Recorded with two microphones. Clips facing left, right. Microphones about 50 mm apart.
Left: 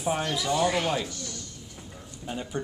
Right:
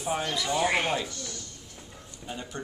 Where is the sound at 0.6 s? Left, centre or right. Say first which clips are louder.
Even; right.